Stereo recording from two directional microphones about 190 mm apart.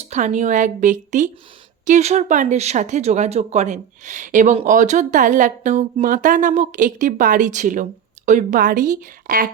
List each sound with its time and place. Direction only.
0.1 s speech: 40° right (ahead or behind)